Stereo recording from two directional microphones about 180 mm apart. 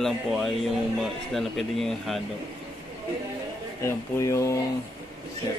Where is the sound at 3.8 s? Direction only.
15° left (ahead or behind).